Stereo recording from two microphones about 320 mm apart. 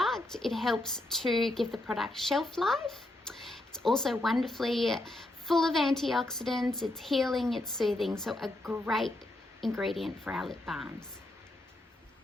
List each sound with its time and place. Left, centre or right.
0.0 s a woman's voice: centre